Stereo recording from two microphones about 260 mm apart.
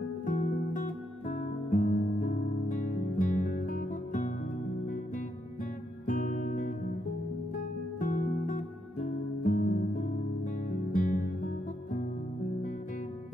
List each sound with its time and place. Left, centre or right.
0.2 s music: left
8.0 s music: left